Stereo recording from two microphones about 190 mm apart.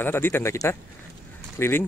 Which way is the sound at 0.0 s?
10° left (ahead or behind).